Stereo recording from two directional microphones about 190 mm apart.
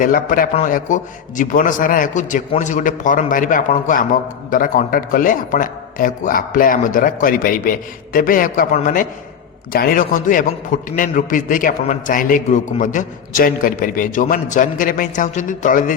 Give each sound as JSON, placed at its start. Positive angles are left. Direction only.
{"t": 0.0, "sound": "a man's voice", "side_deg": 45}
{"t": 9.7, "sound": "a man's voice", "side_deg": 50}